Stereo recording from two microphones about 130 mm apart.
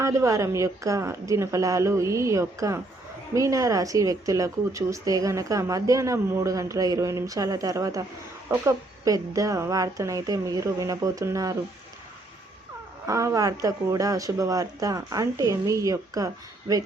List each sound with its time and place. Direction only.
0.0 s speech: 25° right (ahead or behind)
13.1 s speech: 25° right (ahead or behind)